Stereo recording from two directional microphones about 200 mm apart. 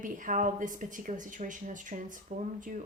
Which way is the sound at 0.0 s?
40° right (ahead or behind).